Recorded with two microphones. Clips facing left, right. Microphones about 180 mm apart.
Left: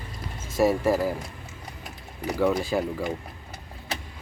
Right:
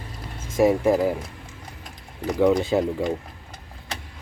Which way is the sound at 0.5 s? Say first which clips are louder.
Right 3 dB; 15° right (ahead or behind).